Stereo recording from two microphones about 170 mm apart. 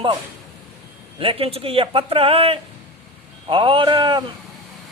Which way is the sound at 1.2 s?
30° right (ahead or behind).